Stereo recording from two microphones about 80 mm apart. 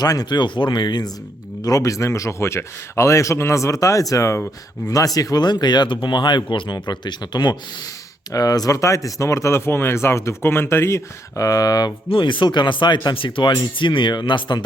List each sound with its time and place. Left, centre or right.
0.0 s speech: left
1.6 s speech: left
8.3 s speech: left
12.1 s speech: left